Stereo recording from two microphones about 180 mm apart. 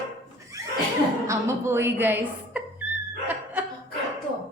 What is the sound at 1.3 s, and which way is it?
A woman's voice, 15° right (ahead or behind).